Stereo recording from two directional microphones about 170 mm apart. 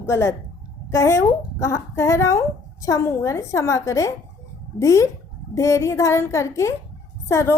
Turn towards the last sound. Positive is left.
turn(degrees=15)  # may be behind; listen again after turning